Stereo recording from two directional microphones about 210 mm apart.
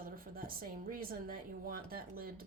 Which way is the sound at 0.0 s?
45° right (ahead or behind).